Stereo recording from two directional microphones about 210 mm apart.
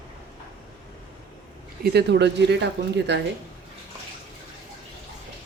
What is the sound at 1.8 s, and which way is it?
Speech, 55° right (ahead or behind).